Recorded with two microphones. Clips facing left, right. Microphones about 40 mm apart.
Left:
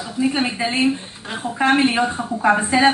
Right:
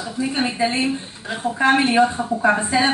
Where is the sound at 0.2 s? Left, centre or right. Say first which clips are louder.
Left 1 dB; centre.